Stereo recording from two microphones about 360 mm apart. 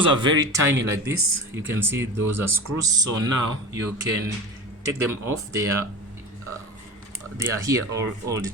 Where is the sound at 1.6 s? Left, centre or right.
Centre.